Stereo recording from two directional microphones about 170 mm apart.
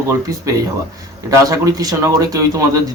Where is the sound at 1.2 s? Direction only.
20° right (ahead or behind).